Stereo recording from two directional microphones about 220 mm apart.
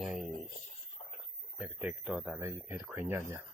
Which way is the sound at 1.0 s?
25° left (ahead or behind).